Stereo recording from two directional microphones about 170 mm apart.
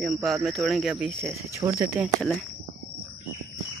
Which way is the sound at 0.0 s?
Centre (ahead or behind).